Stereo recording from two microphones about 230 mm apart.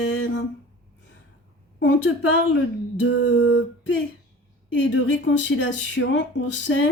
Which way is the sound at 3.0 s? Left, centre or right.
Left.